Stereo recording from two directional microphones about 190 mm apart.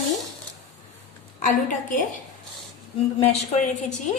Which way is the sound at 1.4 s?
45° left (ahead or behind).